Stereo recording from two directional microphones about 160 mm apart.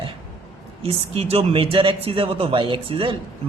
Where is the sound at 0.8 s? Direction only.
35° right (ahead or behind).